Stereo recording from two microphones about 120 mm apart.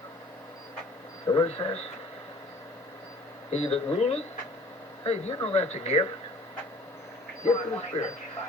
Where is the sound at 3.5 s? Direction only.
60° left (ahead or behind).